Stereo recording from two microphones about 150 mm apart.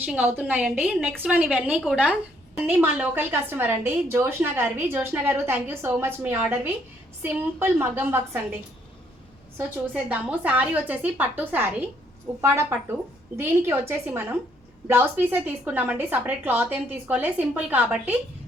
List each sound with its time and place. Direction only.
0.0 s a woman's voice: 10° right (ahead or behind)
9.9 s a woman's voice: 10° right (ahead or behind)